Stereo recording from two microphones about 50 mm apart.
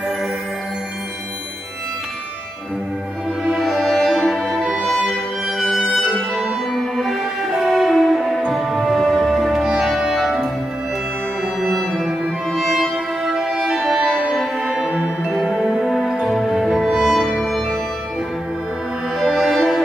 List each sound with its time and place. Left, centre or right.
3.4 s music: centre
5.1 s violin: centre
5.9 s music: centre
11.7 s music: centre
14.7 s music: centre
19.1 s music: centre